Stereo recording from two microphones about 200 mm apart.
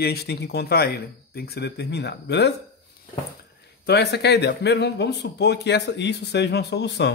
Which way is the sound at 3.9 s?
55° left (ahead or behind).